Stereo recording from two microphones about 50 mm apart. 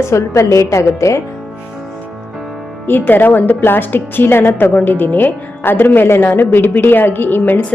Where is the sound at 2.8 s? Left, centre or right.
Left.